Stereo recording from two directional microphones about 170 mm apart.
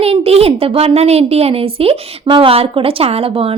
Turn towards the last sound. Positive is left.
turn(degrees=-35)  # may be behind; listen again after turning